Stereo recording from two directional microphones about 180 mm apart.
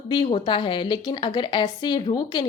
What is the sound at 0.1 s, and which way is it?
A woman's voice, 25° left (ahead or behind).